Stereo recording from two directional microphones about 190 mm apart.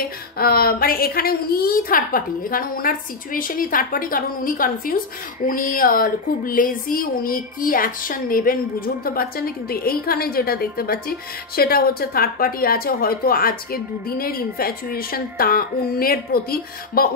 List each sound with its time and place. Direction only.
0.4 s a woman's voice: 55° left (ahead or behind)